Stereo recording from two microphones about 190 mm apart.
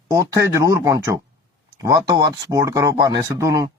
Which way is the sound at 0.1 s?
15° right (ahead or behind).